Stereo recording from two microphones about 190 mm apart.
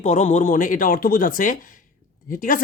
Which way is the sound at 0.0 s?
40° left (ahead or behind).